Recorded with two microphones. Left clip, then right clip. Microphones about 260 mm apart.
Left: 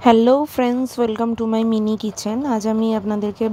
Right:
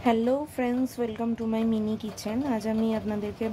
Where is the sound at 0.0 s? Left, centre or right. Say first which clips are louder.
Left 12 dB; left.